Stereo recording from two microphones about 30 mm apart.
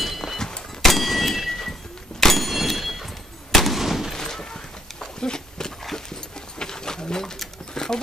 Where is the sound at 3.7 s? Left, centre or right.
Centre.